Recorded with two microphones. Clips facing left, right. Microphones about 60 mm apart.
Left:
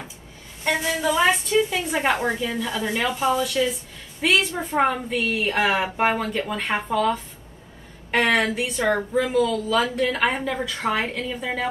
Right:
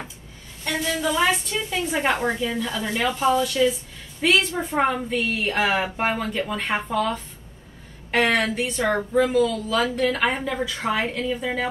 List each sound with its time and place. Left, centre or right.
0.7 s a woman's voice: centre
1.4 s a woman's voice: centre